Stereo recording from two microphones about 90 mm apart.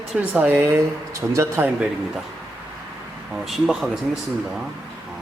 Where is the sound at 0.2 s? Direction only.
20° right (ahead or behind).